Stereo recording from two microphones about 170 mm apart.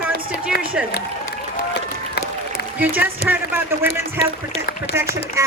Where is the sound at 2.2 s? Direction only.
70° left (ahead or behind).